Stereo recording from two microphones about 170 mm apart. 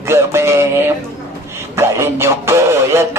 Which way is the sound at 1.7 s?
15° right (ahead or behind).